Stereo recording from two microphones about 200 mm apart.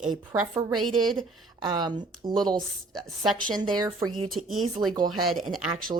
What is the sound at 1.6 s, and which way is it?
Speech, 20° right (ahead or behind).